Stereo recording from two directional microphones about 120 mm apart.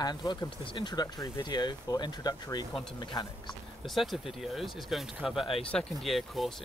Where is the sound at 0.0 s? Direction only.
35° left (ahead or behind).